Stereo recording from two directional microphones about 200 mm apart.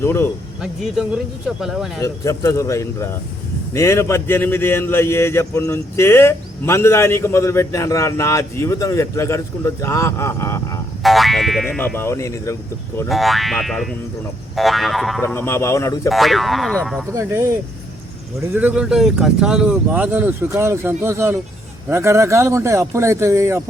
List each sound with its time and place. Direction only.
0.0 s speech: 10° left (ahead or behind)
0.6 s speech: centre (ahead or behind)
2.0 s speech: 15° left (ahead or behind)
11.0 s speech: centre (ahead or behind)
11.9 s speech: 15° left (ahead or behind)
13.1 s speech: centre (ahead or behind)
15.2 s speech: 10° left (ahead or behind)
16.0 s speech: centre (ahead or behind)
17.1 s speech: 15° right (ahead or behind)